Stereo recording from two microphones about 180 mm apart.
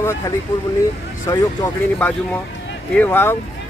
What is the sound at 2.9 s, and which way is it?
Speech, 10° left (ahead or behind).